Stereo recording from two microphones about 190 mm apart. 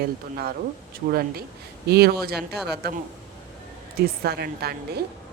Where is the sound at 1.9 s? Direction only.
55° right (ahead or behind).